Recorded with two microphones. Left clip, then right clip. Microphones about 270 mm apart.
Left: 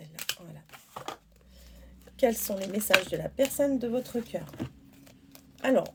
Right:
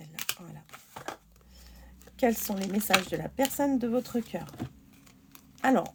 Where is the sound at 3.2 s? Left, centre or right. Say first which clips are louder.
Left 2 dB; right.